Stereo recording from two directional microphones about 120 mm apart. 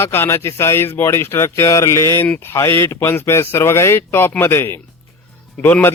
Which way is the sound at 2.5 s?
25° left (ahead or behind).